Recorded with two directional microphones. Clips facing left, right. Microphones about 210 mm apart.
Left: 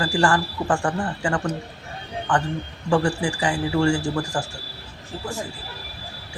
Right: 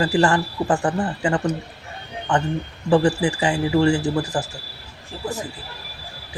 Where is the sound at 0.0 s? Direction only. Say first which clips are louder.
Right 3 dB; 20° right (ahead or behind).